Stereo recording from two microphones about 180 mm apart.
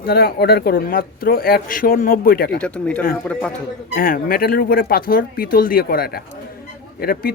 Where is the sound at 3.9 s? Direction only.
55° left (ahead or behind).